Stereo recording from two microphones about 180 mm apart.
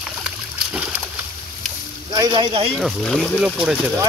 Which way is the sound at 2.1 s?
25° right (ahead or behind).